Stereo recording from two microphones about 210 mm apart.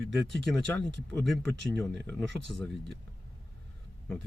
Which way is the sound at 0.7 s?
55° right (ahead or behind).